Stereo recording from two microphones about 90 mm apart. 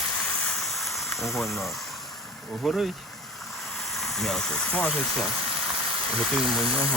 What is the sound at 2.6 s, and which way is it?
Speech, centre (ahead or behind).